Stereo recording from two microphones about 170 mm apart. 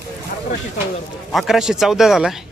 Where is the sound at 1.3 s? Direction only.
Centre (ahead or behind).